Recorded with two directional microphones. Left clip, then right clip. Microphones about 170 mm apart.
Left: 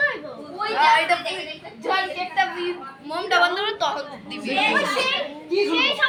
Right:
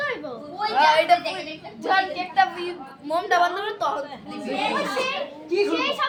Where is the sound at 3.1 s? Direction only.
80° right; by 4.0 s 60° right (ahead or behind).